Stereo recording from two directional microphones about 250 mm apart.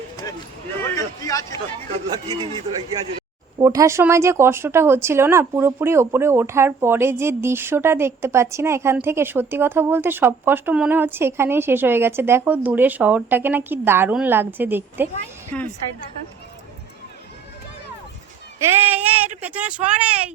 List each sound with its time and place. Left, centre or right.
0.2 s a sound: centre
2.1 s speech: centre
3.6 s speech: centre
15.5 s a woman's voice: centre
18.7 s speech: centre